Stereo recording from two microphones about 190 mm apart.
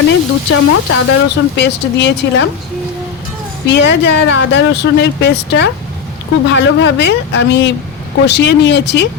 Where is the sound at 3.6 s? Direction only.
65° left (ahead or behind).